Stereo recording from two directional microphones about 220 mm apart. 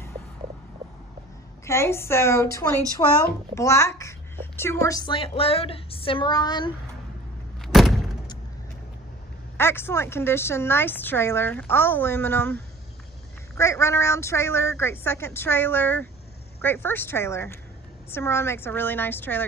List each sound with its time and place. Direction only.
1.7 s a woman's voice: 10° left (ahead or behind)
7.6 s door: centre (ahead or behind)
9.6 s a woman's voice: 10° left (ahead or behind)